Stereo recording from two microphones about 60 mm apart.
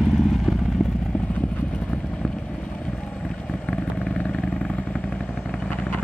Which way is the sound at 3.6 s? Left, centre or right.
Centre.